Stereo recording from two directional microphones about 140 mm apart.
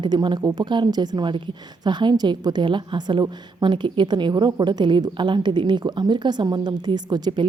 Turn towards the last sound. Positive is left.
turn(degrees=-30)  # may be behind; listen again after turning